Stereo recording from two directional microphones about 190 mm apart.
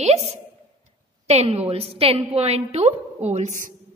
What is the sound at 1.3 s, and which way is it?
A woman's voice, 35° right (ahead or behind).